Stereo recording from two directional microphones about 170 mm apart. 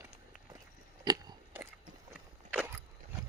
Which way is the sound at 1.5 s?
15° right (ahead or behind).